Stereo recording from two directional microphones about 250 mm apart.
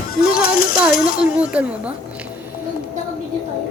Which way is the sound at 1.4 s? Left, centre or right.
Centre.